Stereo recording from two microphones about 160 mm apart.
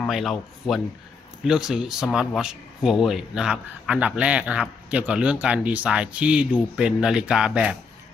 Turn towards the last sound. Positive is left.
turn(degrees=-5)  # may be behind; listen again after turning